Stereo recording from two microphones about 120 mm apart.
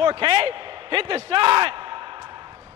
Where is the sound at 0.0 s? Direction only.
45° right (ahead or behind).